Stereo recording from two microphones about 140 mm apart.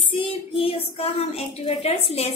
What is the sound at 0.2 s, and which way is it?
A woman's voice, 40° left (ahead or behind).